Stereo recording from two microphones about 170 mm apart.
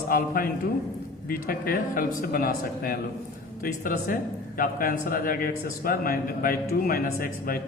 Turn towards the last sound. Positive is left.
turn(degrees=60)  # may be behind; listen again after turning